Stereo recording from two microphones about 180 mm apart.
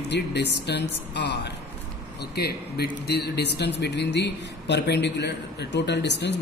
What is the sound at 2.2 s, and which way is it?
A man's voice, 60° left (ahead or behind).